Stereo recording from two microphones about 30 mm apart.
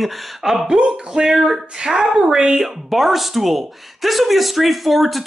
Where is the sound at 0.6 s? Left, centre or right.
Right.